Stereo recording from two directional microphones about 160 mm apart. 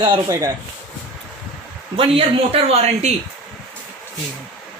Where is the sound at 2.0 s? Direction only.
35° right (ahead or behind).